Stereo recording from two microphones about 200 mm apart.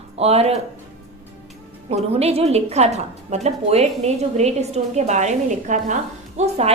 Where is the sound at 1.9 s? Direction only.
30° right (ahead or behind).